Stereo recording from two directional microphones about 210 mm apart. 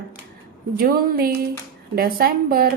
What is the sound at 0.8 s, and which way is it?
A woman's voice, 45° right (ahead or behind).